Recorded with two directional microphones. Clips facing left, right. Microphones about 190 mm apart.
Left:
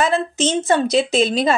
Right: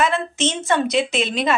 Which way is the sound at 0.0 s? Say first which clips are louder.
Left 2 dB; 35° left (ahead or behind).